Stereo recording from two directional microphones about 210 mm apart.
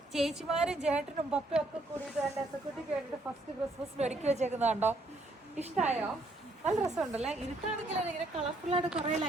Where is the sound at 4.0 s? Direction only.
30° right (ahead or behind).